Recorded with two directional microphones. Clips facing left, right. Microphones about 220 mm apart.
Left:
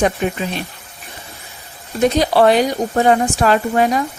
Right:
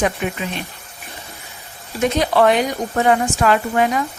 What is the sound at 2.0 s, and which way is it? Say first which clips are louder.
Speech: left 3 dB; 35° left (ahead or behind).